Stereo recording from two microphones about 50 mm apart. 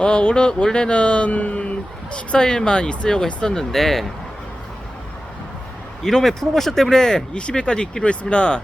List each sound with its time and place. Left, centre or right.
0.0 s speech: centre
6.0 s speech: centre